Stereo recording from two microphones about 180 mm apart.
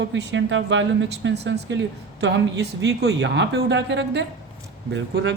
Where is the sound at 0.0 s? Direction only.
75° right (ahead or behind).